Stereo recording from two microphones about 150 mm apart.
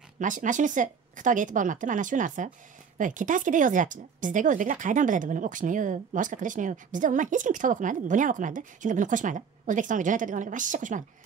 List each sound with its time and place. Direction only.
0.2 s speech: 55° right (ahead or behind)